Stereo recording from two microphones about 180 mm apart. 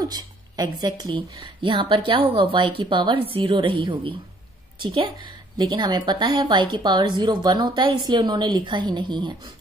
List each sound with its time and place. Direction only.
0.0 s a woman's voice: 20° right (ahead or behind)